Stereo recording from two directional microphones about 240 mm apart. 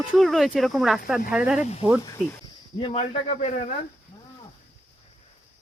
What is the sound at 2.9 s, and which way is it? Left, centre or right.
Speech, left.